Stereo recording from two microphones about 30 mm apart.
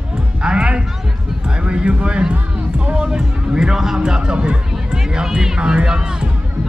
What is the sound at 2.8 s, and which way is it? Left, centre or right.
Music, right.